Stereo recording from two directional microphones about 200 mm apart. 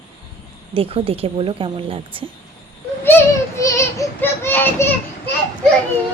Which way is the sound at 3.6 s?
15° left (ahead or behind).